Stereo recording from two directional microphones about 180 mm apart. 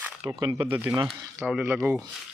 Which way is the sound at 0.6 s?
10° right (ahead or behind).